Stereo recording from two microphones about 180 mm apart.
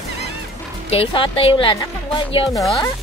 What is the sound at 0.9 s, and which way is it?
Speech, 30° left (ahead or behind).